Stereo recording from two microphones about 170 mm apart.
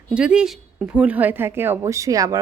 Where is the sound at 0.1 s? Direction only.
5° right (ahead or behind).